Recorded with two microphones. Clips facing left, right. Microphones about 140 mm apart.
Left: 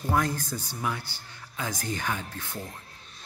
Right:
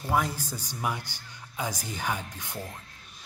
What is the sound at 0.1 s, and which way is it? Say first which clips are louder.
A man's voice: left 1 dB; 5° right (ahead or behind).